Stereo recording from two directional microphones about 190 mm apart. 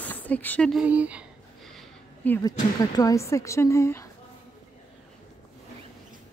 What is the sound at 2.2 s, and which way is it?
Speech, 15° left (ahead or behind).